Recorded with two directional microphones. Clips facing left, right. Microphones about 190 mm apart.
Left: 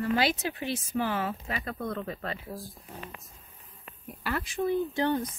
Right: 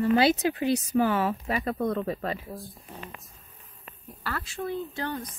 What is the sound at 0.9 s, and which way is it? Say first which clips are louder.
Speech: right 2 dB; 40° right (ahead or behind).